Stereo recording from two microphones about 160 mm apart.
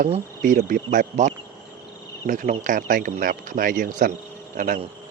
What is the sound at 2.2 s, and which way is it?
A man's voice, 55° right (ahead or behind).